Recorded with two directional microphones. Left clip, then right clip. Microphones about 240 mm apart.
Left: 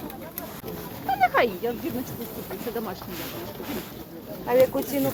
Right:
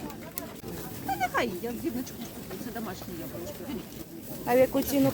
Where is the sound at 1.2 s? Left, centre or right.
Right.